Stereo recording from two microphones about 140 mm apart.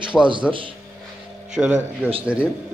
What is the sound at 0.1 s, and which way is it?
Speech, centre (ahead or behind).